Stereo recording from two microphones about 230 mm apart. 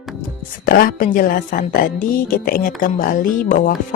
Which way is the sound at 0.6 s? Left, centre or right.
Left.